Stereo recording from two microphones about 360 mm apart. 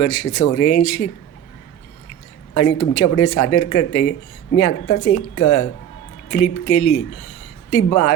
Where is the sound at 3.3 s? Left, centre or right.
Left.